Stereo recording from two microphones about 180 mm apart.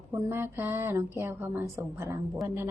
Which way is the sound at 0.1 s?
15° right (ahead or behind).